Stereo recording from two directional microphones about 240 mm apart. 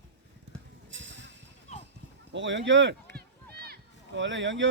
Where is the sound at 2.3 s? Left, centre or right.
Right.